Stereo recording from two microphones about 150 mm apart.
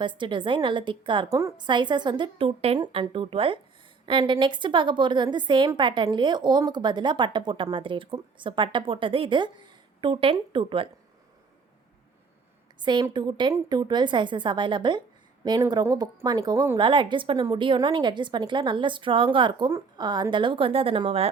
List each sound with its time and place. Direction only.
0.0 s a woman's voice: 30° right (ahead or behind)
12.8 s a woman's voice: 30° right (ahead or behind)